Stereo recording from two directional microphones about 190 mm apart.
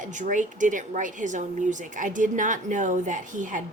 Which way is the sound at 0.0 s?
40° right (ahead or behind).